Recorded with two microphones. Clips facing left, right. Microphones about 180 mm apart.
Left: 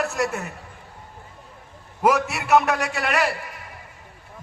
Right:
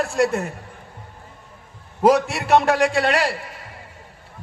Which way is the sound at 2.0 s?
35° right (ahead or behind).